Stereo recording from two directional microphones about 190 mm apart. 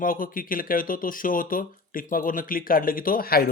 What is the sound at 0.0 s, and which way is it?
Speech, 45° left (ahead or behind).